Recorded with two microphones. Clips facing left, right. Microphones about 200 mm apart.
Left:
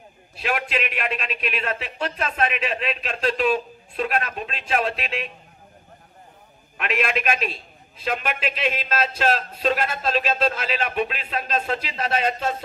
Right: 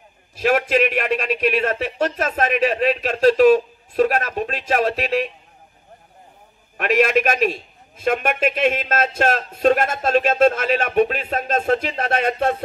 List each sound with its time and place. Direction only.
0.4 s speech: 45° right (ahead or behind)
6.8 s speech: 40° right (ahead or behind); by 12.6 s 55° right (ahead or behind)